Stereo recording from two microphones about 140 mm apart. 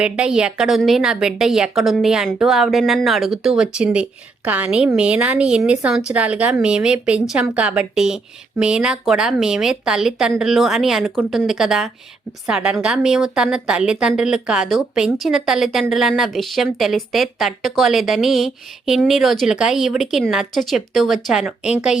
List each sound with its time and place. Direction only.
0.0 s a woman's voice: 5° right (ahead or behind)